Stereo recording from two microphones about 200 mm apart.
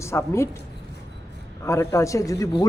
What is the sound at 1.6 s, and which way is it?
Speech, 15° left (ahead or behind).